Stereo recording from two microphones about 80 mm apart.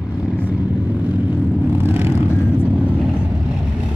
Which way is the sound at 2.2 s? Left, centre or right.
Left.